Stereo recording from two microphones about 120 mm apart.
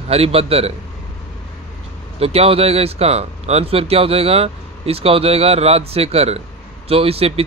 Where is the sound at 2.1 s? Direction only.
55° right (ahead or behind).